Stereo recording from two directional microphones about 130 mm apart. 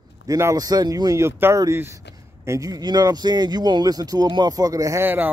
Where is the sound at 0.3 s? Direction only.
25° right (ahead or behind).